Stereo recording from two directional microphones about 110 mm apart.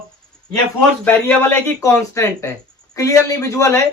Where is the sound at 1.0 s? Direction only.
15° left (ahead or behind).